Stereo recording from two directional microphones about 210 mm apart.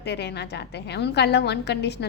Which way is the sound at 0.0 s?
55° left (ahead or behind).